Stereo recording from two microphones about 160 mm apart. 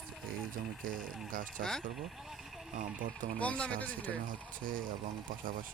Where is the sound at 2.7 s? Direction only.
55° right (ahead or behind).